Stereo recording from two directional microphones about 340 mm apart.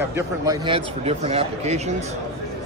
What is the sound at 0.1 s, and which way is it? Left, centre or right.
A man's voice, centre.